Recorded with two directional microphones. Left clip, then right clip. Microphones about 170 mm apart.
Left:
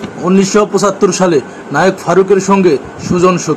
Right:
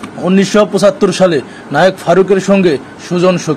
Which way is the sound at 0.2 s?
30° right (ahead or behind).